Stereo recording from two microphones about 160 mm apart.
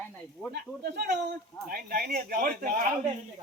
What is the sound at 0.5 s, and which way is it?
Speech, 90° right.